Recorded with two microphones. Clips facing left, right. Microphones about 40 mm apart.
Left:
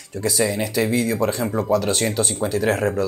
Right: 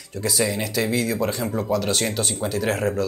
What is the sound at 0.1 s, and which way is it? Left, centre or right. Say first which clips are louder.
Speech: left 2 dB; centre.